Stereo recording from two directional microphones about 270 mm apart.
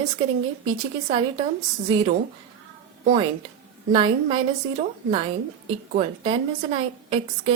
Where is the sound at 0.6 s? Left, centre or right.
Centre.